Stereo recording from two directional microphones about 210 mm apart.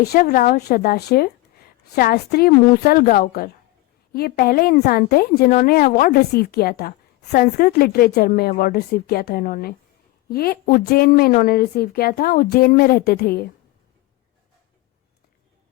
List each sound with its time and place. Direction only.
0.0 s a woman's voice: 45° left (ahead or behind)